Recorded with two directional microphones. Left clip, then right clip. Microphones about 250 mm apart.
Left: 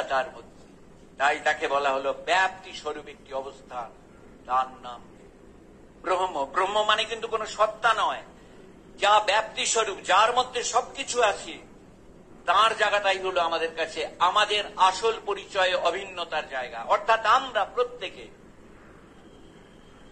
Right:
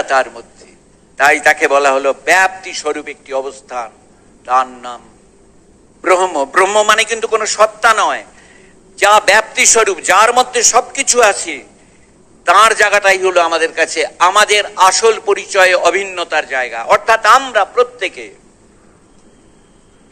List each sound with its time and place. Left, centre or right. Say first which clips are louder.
0.1 s a man's voice: right 13 dB; right
6.0 s a man's voice: right 14 dB; right